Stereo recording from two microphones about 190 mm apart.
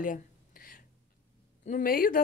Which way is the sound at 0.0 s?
45° left (ahead or behind).